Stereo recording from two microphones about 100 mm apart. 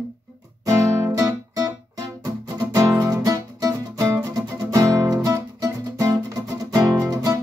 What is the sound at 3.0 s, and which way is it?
Music, 35° right (ahead or behind).